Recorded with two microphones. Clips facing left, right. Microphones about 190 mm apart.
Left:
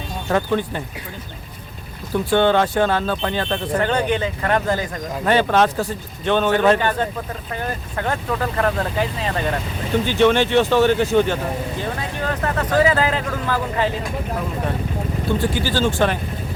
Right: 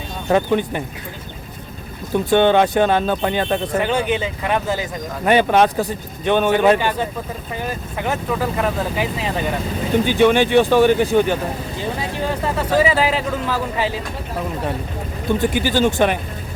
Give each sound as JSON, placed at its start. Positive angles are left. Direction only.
{"t": 0.3, "sound": "speech", "side_deg": -15}
{"t": 2.1, "sound": "speech", "side_deg": -20}
{"t": 15.4, "sound": "speech", "side_deg": -15}